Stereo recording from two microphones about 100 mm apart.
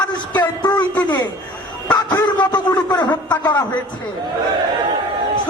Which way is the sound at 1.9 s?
40° left (ahead or behind).